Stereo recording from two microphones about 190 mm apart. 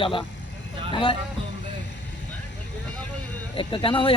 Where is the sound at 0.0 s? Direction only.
25° left (ahead or behind).